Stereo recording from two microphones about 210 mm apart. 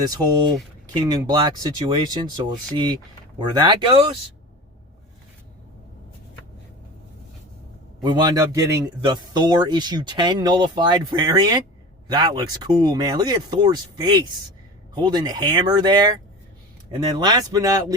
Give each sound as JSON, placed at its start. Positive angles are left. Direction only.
{"t": 0.0, "sound": "speech", "side_deg": -20}
{"t": 8.0, "sound": "speech", "side_deg": -20}